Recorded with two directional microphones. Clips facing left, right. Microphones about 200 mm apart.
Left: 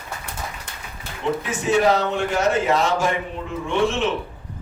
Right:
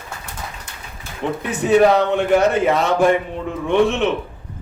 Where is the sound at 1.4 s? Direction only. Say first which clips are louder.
Right 8 dB; 60° right (ahead or behind).